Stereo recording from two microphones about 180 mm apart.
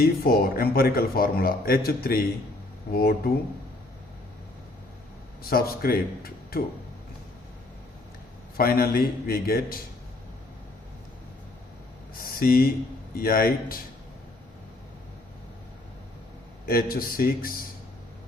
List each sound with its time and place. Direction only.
0.0 s a man's voice: 55° left (ahead or behind)
5.4 s a man's voice: 55° left (ahead or behind)
8.5 s a man's voice: 55° left (ahead or behind)
12.2 s a man's voice: 55° left (ahead or behind)
16.6 s a man's voice: 55° left (ahead or behind)